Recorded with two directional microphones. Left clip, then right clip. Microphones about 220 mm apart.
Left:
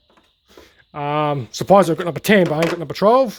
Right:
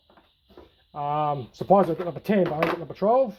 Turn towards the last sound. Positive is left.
turn(degrees=55)  # may be behind; listen again after turning